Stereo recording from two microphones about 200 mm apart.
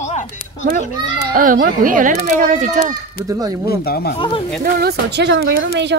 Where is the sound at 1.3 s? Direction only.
45° right (ahead or behind).